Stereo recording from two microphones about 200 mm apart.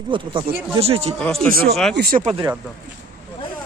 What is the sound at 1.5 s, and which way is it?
Speech, 45° right (ahead or behind).